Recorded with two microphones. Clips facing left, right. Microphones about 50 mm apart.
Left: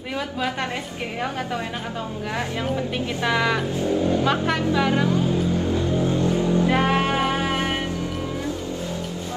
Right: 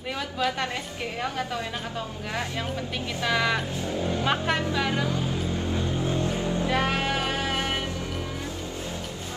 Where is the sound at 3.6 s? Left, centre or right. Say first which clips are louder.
Left 7 dB; left.